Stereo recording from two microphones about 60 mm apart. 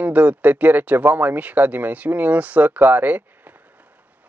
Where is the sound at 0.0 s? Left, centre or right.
Right.